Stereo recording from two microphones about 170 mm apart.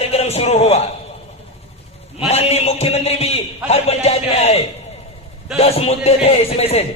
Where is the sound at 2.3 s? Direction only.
40° left (ahead or behind).